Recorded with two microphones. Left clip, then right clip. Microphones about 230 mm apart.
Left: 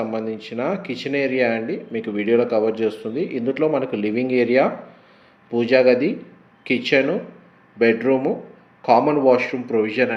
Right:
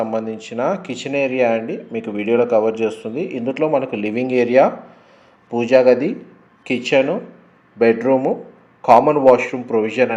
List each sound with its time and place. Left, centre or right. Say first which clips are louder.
0.0 s speech: right 3 dB; centre
7.8 s speech: right 3 dB; right